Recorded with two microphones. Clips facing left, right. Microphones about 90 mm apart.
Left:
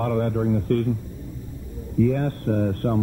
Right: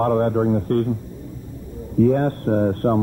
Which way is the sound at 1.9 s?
40° right (ahead or behind).